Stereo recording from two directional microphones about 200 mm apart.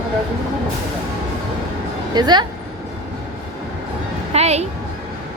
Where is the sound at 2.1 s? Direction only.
20° right (ahead or behind).